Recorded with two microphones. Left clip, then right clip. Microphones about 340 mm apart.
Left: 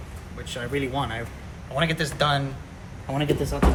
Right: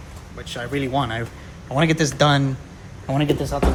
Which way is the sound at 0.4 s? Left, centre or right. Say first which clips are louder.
Right 2 dB; right.